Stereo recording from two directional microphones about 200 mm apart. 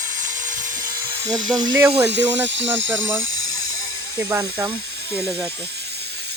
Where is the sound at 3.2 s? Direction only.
75° right (ahead or behind).